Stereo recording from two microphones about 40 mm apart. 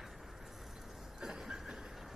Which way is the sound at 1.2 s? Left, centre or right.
Centre.